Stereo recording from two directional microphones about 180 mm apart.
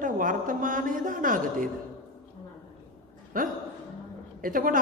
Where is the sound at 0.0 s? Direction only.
50° right (ahead or behind).